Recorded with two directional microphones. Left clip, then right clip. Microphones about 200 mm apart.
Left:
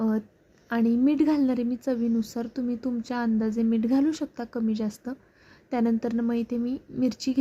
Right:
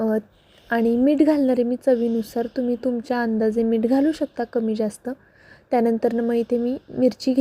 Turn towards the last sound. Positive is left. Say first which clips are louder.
# right 8 dB
turn(degrees=-15)  # may be behind; listen again after turning